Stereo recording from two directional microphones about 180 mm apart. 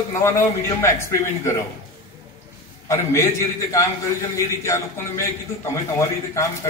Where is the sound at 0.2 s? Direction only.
15° left (ahead or behind).